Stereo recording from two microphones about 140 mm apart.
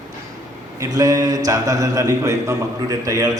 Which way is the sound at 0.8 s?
25° right (ahead or behind).